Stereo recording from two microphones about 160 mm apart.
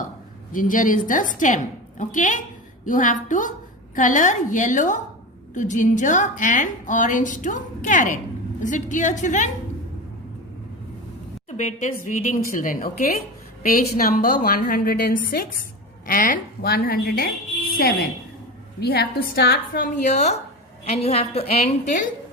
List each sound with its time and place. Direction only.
0.5 s a woman's voice: 55° left (ahead or behind)
11.5 s a woman's voice: 50° left (ahead or behind); by 18.1 s 70° left (ahead or behind)
18.8 s a woman's voice: 90° left; by 22.0 s 45° left (ahead or behind)